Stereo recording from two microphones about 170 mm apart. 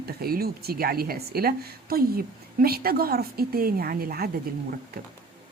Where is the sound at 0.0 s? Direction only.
65° right (ahead or behind).